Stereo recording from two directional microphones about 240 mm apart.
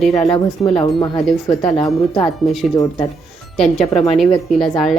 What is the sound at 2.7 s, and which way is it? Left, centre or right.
Speech, centre.